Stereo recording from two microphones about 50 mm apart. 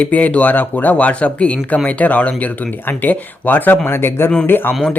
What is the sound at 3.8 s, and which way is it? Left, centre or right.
Speech, left.